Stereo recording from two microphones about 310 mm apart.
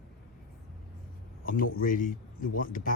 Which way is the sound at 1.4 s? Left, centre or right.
Left.